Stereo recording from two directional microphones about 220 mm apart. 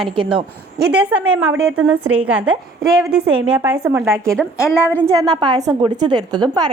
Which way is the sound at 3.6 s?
10° right (ahead or behind).